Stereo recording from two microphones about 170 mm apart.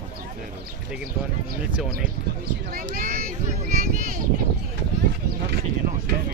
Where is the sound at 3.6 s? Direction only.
45° right (ahead or behind).